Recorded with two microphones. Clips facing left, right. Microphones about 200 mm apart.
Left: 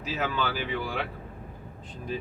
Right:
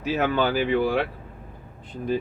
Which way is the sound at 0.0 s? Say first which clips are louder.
Right 7 dB; 60° right (ahead or behind).